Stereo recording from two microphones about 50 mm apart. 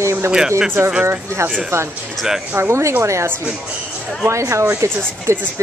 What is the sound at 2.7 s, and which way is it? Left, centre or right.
Speech, right.